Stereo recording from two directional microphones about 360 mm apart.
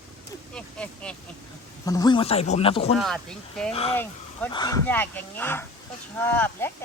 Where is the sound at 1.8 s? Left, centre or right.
Centre.